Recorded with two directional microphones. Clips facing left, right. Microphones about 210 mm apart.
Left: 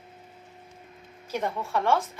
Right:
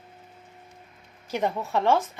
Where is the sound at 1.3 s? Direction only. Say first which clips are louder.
Right 2 dB; 15° right (ahead or behind).